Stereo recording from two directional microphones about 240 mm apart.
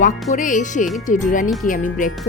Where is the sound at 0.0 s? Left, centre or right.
Left.